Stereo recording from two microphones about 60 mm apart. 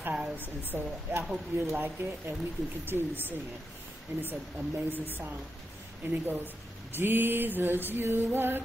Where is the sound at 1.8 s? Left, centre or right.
Right.